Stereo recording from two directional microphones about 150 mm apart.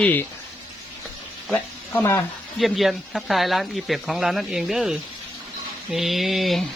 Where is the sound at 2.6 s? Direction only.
Centre (ahead or behind).